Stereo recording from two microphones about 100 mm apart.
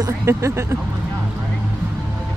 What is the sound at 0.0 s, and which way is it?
Speech, 30° right (ahead or behind).